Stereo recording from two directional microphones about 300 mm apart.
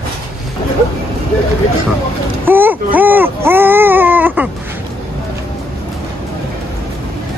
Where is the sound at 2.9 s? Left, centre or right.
Centre.